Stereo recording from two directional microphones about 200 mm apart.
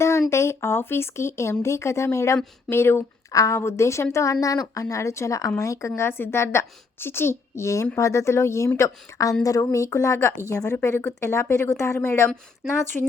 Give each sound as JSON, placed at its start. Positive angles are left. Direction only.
{"t": 0.0, "sound": "a woman's voice", "side_deg": 15}